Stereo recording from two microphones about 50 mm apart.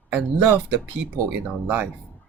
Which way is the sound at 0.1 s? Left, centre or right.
Right.